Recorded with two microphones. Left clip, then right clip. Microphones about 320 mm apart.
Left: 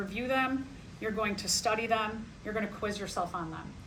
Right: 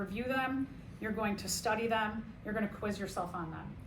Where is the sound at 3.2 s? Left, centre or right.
Left.